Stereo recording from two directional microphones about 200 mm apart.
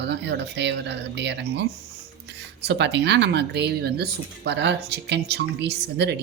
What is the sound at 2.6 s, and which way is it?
Speech, 60° right (ahead or behind).